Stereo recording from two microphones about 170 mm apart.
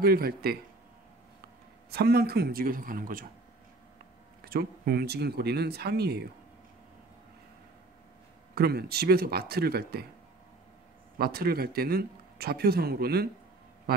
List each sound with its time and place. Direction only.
0.0 s speech: 65° right (ahead or behind)
1.9 s speech: 70° right (ahead or behind)
4.5 s speech: 65° right (ahead or behind)
8.5 s speech: 70° right (ahead or behind)
11.1 s a man's voice: 65° right (ahead or behind)